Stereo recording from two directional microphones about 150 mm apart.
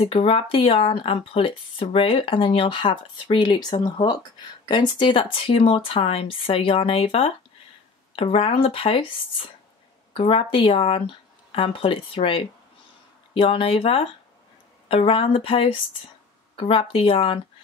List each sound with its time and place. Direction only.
0.0 s speech: 40° left (ahead or behind)